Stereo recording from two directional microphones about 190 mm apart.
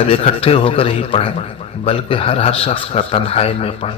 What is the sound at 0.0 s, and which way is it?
A man's voice, 30° left (ahead or behind).